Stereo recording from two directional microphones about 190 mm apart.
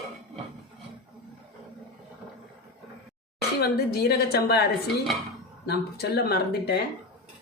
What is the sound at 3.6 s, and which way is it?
Speech, 60° left (ahead or behind).